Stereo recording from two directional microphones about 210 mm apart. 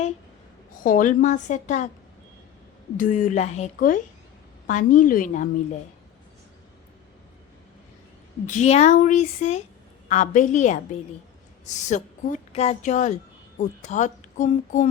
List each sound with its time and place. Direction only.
0.7 s speech: 40° left (ahead or behind)
3.0 s speech: 40° left (ahead or behind)
8.4 s speech: 35° left (ahead or behind)